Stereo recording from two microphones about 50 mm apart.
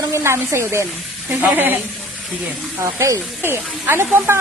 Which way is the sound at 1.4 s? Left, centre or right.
Right.